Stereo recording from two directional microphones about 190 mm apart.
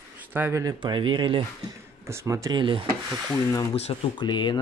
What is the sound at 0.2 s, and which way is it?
Speech, 10° right (ahead or behind).